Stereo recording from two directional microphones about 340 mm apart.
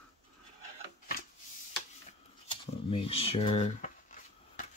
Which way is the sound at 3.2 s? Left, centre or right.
Centre.